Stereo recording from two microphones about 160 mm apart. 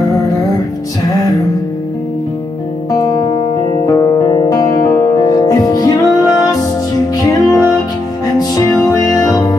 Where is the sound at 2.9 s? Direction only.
25° left (ahead or behind).